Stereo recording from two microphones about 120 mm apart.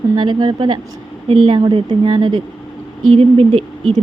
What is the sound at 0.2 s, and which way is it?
Speech, 40° right (ahead or behind).